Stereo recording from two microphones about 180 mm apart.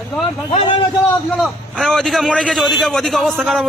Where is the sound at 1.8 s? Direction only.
Centre (ahead or behind).